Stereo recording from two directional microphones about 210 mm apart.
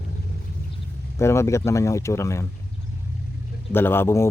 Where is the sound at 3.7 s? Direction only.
10° left (ahead or behind).